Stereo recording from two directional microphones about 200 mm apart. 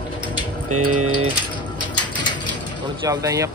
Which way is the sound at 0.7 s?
90° right.